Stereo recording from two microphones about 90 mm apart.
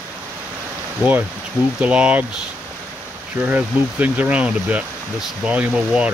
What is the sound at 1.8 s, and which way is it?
Speech, 15° right (ahead or behind).